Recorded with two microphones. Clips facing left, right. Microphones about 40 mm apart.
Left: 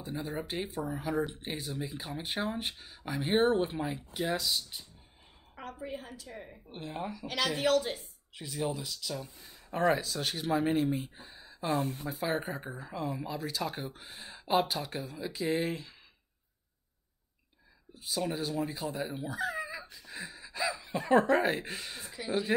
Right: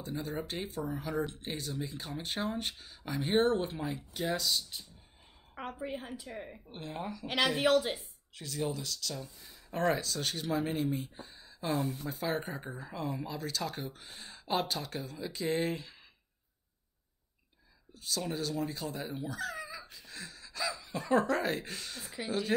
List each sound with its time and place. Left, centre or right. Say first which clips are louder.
0.0 s speech: even; centre
5.8 s speech: even; centre
6.7 s speech: left 2 dB; centre
7.2 s speech: right 1 dB; centre
8.4 s speech: left 1 dB; centre
11.7 s speech: left 2 dB; left
12.1 s speech: left 2 dB; centre
17.9 s speech: left 2 dB; centre
19.2 s a sound: left 4 dB; centre
21.1 s speech: left 4 dB; left